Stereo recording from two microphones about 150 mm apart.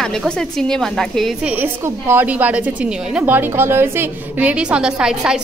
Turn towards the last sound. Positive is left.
turn(degrees=-5)  # may be behind; listen again after turning